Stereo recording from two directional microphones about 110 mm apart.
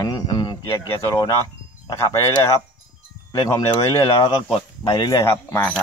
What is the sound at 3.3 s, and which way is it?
Wind chime, 35° left (ahead or behind).